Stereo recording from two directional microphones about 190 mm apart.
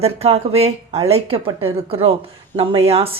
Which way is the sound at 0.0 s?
30° right (ahead or behind).